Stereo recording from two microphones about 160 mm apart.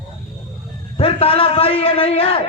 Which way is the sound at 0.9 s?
35° left (ahead or behind).